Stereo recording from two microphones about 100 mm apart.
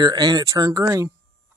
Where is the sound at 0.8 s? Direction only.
30° right (ahead or behind).